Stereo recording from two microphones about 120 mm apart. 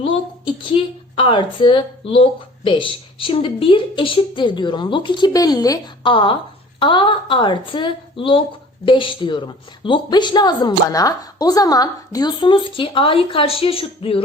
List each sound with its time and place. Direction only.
0.0 s a woman's voice: 45° left (ahead or behind)
6.1 s a woman's voice: 45° left (ahead or behind)